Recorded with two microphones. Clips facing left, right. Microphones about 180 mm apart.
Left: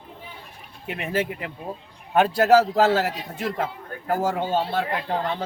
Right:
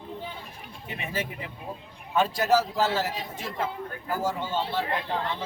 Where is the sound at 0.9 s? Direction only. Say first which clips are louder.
Left 7 dB; 65° left (ahead or behind).